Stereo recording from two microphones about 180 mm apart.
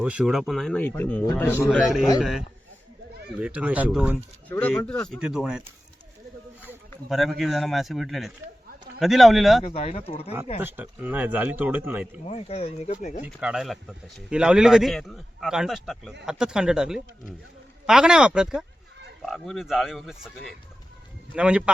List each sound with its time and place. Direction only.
0.0 s speech: 5° right (ahead or behind); by 1.6 s 10° left (ahead or behind)
1.7 s speech: 5° right (ahead or behind)
3.4 s speech: 5° right (ahead or behind)
4.4 s speech: 10° left (ahead or behind)
7.1 s speech: centre (ahead or behind)
9.6 s speech: 35° left (ahead or behind)
10.6 s speech: 10° right (ahead or behind)
12.2 s speech: 35° left (ahead or behind)
13.2 s speech: 5° right (ahead or behind)